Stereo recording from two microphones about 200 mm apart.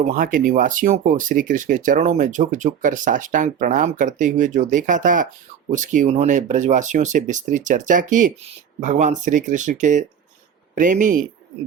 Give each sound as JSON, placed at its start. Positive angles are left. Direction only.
{"t": 0.0, "sound": "speech", "side_deg": -45}